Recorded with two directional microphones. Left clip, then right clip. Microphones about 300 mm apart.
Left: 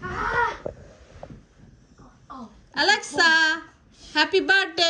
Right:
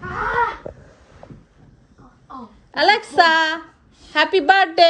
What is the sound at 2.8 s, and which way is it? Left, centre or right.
A woman's voice, centre.